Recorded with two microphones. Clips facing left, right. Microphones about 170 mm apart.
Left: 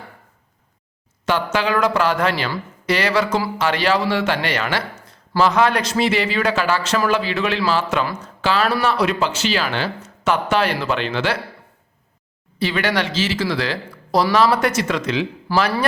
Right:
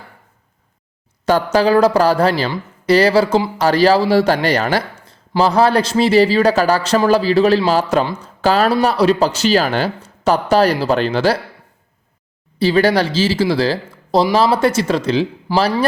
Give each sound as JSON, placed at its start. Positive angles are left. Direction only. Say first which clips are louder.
{"t": 1.2, "sound": "speech", "louder": "right 6 dB", "side_deg": -35}
{"t": 12.5, "sound": "speech", "louder": "right 7 dB", "side_deg": -35}
{"t": 15.5, "sound": "speech", "louder": "right 2 dB", "side_deg": -15}